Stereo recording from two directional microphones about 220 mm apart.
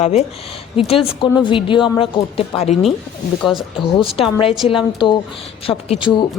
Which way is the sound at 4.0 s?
25° left (ahead or behind).